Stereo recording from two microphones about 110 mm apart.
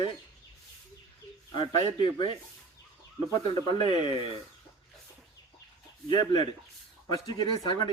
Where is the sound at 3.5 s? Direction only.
40° left (ahead or behind).